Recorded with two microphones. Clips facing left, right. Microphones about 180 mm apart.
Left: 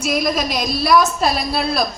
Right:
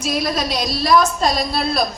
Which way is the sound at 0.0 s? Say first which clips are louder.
Left 2 dB; 10° left (ahead or behind).